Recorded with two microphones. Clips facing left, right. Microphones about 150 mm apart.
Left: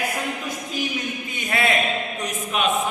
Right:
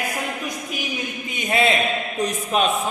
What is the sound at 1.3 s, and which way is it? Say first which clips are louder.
Music: right 4 dB; 20° right (ahead or behind).